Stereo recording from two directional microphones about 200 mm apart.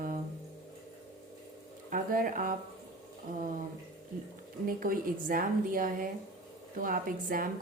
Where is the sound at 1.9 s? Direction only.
45° right (ahead or behind).